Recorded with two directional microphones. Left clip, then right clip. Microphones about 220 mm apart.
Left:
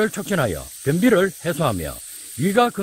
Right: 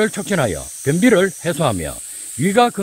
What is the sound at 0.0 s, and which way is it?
Speech, centre (ahead or behind).